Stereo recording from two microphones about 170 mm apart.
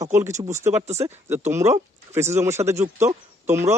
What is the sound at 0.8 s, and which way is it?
Speech, 40° right (ahead or behind).